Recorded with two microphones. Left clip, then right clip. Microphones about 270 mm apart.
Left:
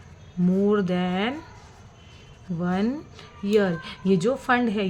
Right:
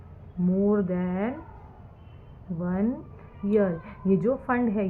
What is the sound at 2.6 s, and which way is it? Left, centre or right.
A woman's voice, left.